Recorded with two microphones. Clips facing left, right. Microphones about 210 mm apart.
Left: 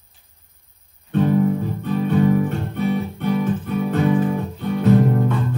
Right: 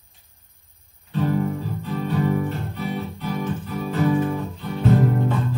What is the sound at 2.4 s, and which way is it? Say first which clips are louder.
Music: left 6 dB; 55° left (ahead or behind).